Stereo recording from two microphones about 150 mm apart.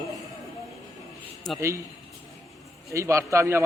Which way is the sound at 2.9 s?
20° right (ahead or behind).